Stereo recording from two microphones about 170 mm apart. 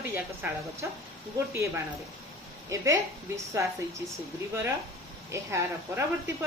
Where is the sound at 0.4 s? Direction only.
10° right (ahead or behind).